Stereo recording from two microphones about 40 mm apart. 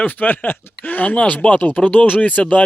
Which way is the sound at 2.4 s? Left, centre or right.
Left.